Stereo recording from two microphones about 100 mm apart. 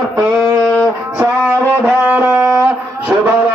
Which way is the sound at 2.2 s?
25° right (ahead or behind).